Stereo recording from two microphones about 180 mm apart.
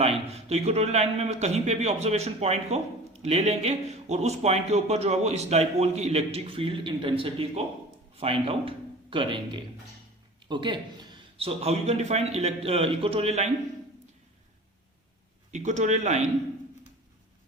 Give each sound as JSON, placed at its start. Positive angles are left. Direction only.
{"t": 0.0, "sound": "a man's voice", "side_deg": -35}
{"t": 15.5, "sound": "a man's voice", "side_deg": -40}